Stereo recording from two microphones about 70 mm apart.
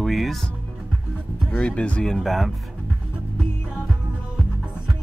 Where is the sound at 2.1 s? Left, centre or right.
Centre.